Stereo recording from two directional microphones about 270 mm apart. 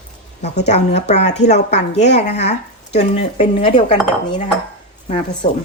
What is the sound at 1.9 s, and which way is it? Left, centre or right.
Dishes, left.